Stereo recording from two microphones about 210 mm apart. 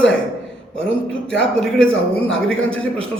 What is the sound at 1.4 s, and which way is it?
A man's voice, 5° left (ahead or behind).